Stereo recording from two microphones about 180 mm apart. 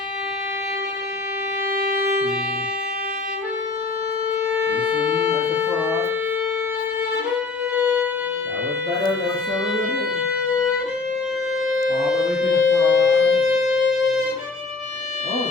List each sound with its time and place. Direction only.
4.5 s wind instrument: 5° right (ahead or behind)
5.5 s music: 10° right (ahead or behind)
11.7 s music: 5° right (ahead or behind)
12.5 s music: 80° left
13.3 s wind instrument: 5° right (ahead or behind)